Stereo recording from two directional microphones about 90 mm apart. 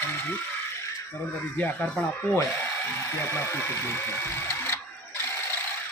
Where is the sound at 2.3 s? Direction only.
25° left (ahead or behind).